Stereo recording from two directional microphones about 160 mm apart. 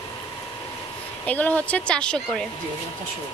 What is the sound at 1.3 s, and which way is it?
A woman's voice, 10° left (ahead or behind).